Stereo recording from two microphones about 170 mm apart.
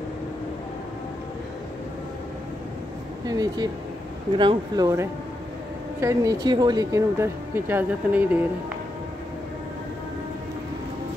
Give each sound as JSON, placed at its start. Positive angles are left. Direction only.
{"t": 3.3, "sound": "speech", "side_deg": -25}